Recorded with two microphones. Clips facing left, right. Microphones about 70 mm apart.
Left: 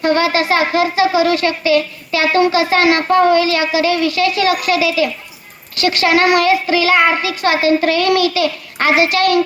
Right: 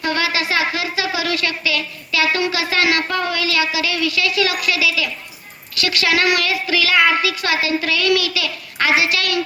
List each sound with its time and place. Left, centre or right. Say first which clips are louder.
0.0 s speech: left 6 dB; left